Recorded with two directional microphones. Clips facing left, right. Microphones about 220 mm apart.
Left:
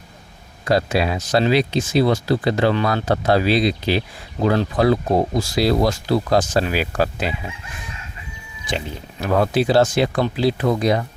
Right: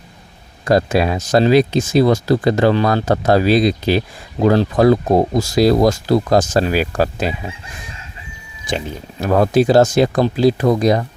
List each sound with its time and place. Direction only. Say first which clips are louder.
0.6 s speech: right 4 dB; 45° right (ahead or behind)
9.2 s speech: right 5 dB; 45° right (ahead or behind)